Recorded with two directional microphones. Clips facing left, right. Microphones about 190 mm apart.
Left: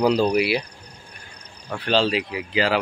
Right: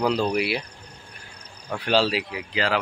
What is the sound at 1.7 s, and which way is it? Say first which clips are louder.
Speech: left 1 dB; 10° right (ahead or behind).